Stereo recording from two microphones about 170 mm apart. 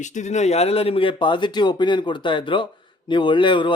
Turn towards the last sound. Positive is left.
turn(degrees=30)  # may be behind; listen again after turning